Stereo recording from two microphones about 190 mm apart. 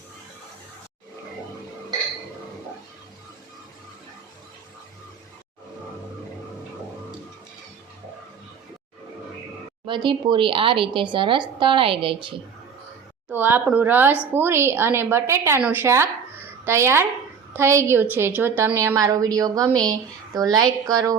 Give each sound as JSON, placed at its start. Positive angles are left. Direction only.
{"t": 9.8, "sound": "speech", "side_deg": -25}
{"t": 13.2, "sound": "a woman's voice", "side_deg": -10}